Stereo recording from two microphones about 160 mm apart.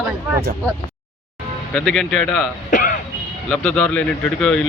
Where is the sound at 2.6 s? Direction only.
55° left (ahead or behind).